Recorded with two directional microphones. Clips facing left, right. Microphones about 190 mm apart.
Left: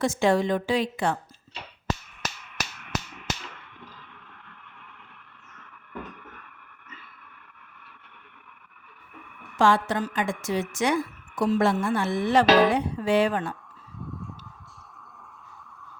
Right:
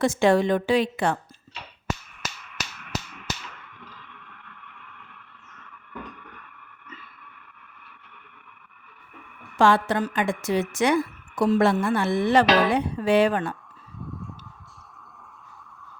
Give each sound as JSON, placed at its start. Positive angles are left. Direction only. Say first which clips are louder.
{"t": 0.0, "sound": "a woman's voice", "louder": "right 3 dB", "side_deg": -65}
{"t": 9.6, "sound": "a woman's voice", "louder": "right 2 dB", "side_deg": -65}
{"t": 14.0, "sound": "a sound", "louder": "right 1 dB", "side_deg": 0}